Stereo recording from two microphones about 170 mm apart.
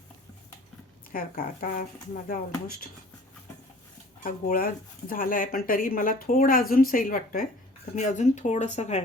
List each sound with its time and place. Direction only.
1.1 s speech: 55° left (ahead or behind)
4.2 s speech: 60° left (ahead or behind); by 9.0 s 40° left (ahead or behind)